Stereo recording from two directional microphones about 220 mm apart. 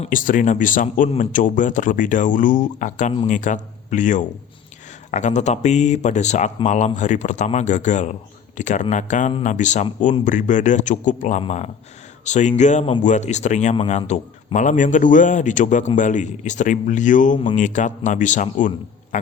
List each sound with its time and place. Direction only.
0.0 s a man's voice: 40° left (ahead or behind)
19.1 s music: 35° left (ahead or behind)